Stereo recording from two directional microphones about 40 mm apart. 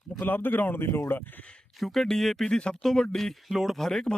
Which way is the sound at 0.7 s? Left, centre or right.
Left.